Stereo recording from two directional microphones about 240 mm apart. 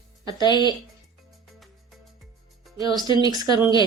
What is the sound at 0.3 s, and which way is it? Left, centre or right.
Speech, centre.